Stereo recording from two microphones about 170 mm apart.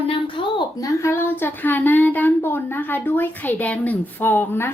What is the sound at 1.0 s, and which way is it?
A woman's voice, 15° left (ahead or behind).